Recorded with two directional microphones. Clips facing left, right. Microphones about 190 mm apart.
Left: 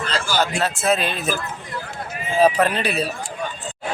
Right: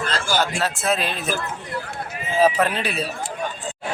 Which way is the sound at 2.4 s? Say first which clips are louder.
Left 2 dB; centre (ahead or behind).